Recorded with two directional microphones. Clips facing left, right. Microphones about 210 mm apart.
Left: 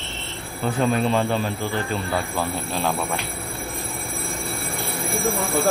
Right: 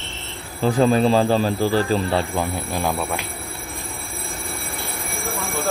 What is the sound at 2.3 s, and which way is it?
Speech, 15° right (ahead or behind).